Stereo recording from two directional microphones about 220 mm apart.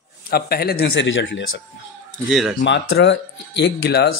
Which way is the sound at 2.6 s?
55° left (ahead or behind).